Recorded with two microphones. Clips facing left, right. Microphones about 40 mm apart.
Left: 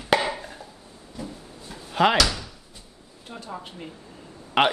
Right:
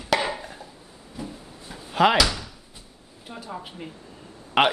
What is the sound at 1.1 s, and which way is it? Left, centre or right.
Door, centre.